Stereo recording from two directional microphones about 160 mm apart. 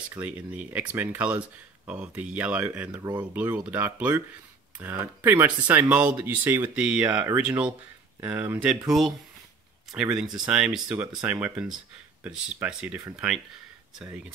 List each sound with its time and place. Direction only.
0.1 s speech: 10° right (ahead or behind)
3.0 s speech: 25° right (ahead or behind)
3.3 s speech: 10° right (ahead or behind)
10.1 s speech: 5° right (ahead or behind)